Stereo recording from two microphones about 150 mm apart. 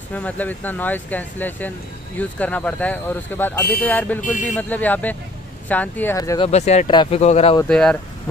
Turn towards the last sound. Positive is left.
turn(degrees=5)  # may be behind; listen again after turning